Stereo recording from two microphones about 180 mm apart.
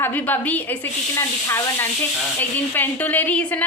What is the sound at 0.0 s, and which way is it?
A woman's voice, 10° left (ahead or behind).